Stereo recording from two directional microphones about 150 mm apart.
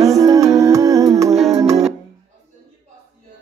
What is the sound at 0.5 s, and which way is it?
Humming, 20° right (ahead or behind).